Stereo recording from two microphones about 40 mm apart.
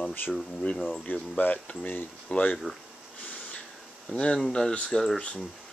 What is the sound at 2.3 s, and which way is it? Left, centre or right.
Speech, left.